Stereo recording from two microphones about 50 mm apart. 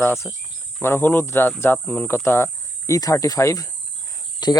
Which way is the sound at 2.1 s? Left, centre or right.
Left.